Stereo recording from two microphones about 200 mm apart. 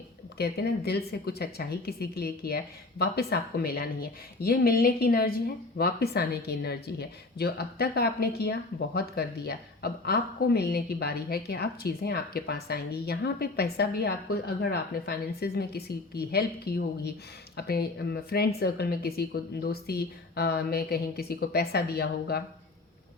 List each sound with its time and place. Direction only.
0.3 s speech: 55° left (ahead or behind)